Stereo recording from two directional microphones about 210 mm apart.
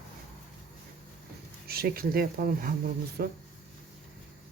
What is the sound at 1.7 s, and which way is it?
Speech, 45° right (ahead or behind).